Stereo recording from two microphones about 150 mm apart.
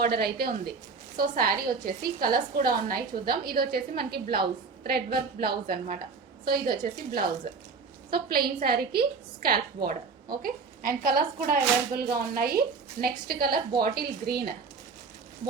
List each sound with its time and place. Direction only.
0.0 s a woman's voice: 90° right
1.1 s a woman's voice: 75° right (ahead or behind)